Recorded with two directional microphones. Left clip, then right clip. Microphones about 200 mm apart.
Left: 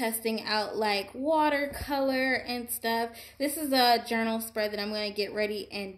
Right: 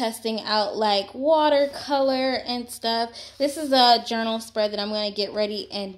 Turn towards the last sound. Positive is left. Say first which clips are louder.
# right 5 dB
turn(degrees=-40)  # may be behind; listen again after turning